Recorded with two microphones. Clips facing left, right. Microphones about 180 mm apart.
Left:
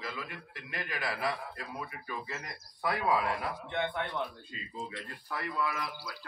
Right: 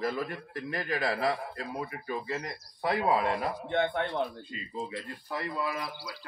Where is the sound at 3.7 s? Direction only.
45° right (ahead or behind).